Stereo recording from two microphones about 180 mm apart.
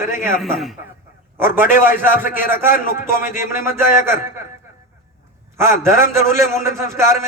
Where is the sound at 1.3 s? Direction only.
15° right (ahead or behind).